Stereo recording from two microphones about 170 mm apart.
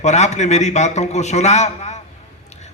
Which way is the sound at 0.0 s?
40° left (ahead or behind).